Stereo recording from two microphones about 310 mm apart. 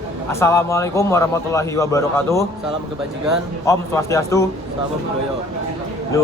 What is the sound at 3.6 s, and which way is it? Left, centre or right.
Speech, centre.